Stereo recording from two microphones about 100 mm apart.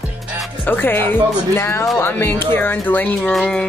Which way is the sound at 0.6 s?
20° left (ahead or behind).